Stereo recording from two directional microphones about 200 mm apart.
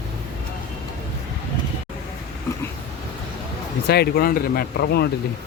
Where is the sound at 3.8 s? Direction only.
55° left (ahead or behind).